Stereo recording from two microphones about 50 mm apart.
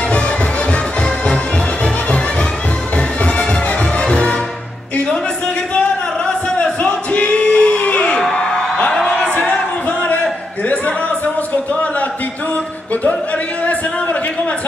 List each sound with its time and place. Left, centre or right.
0.7 s music: left
3.0 s music: left
5.8 s music: left
8.3 s a sound: centre
8.9 s music: centre
9.3 s a sound: left
10.7 s music: left